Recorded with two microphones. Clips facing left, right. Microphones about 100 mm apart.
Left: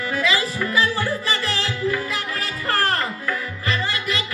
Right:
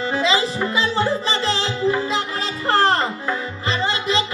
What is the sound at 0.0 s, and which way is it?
Music, 25° right (ahead or behind).